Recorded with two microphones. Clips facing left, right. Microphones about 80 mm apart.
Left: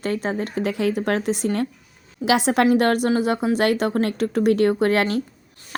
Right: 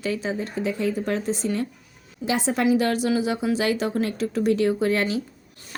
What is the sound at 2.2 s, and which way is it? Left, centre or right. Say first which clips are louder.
A woman's voice: left 5 dB; left.